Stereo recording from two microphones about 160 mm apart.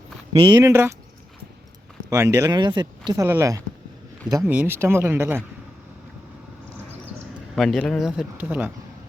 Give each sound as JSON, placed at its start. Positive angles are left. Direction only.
{"t": 0.3, "sound": "speech", "side_deg": -30}
{"t": 0.7, "sound": "speech", "side_deg": -15}
{"t": 2.0, "sound": "speech", "side_deg": -20}
{"t": 3.2, "sound": "speech", "side_deg": -15}
{"t": 7.5, "sound": "speech", "side_deg": 0}